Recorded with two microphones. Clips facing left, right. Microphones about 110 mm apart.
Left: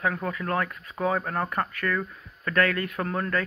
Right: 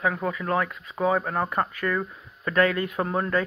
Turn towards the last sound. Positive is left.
turn(degrees=-20)  # may be behind; listen again after turning